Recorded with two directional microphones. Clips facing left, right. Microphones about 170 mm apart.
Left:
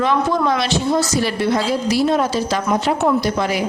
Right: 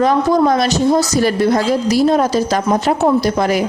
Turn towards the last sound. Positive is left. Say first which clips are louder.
# right 4 dB
turn(degrees=-45)  # may be behind; listen again after turning